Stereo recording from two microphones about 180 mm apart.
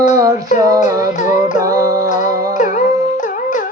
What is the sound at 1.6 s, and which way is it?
Music, 20° right (ahead or behind).